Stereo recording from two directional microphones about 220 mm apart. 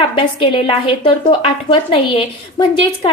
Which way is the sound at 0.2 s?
25° left (ahead or behind).